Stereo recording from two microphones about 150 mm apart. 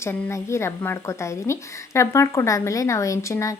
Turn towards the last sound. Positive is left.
turn(degrees=20)  # may be behind; listen again after turning